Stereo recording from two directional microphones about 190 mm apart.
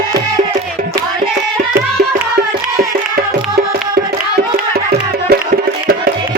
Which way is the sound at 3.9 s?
55° right (ahead or behind).